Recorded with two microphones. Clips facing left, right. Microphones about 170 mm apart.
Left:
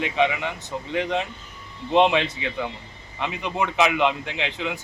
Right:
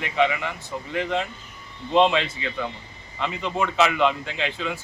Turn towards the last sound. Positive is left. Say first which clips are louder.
# even
turn(degrees=20)  # may be behind; listen again after turning